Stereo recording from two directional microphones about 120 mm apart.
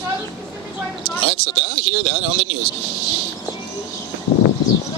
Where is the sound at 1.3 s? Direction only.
55° right (ahead or behind).